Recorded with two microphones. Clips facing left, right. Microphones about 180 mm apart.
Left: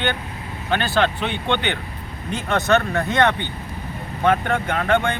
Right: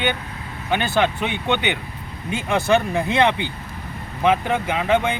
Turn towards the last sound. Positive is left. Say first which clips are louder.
# even
turn(degrees=-5)  # may be behind; listen again after turning